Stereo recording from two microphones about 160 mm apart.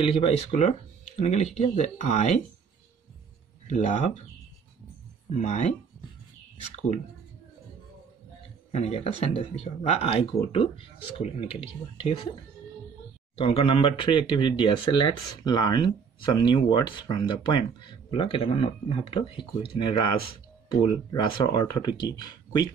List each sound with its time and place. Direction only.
0.0 s speech: 35° left (ahead or behind)
3.6 s speech: 40° left (ahead or behind)
5.3 s speech: 45° left (ahead or behind)
8.7 s speech: 40° left (ahead or behind)
13.4 s speech: 40° left (ahead or behind)